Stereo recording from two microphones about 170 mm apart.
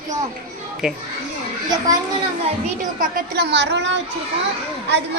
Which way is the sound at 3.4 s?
85° right.